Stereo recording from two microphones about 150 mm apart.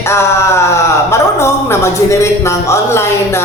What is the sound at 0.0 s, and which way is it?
Speech, 20° left (ahead or behind).